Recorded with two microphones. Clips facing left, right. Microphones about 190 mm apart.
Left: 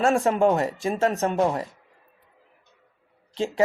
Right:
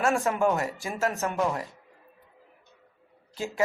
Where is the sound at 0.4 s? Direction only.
30° left (ahead or behind).